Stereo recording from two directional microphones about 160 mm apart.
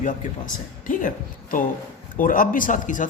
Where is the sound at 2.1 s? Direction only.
60° left (ahead or behind).